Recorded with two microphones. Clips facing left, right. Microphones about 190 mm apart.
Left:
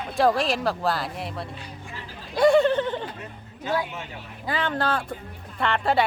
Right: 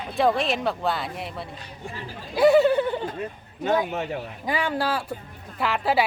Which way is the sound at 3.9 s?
60° right (ahead or behind).